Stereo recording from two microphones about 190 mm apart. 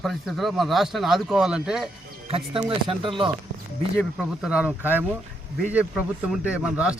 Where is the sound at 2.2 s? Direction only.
30° right (ahead or behind).